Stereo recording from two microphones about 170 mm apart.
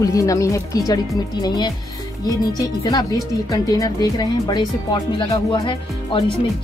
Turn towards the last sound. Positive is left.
turn(degrees=30)  # may be behind; listen again after turning